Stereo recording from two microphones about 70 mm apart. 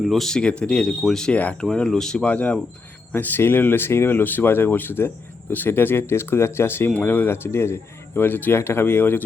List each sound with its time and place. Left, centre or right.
0.0 s speech: centre
2.3 s speech: left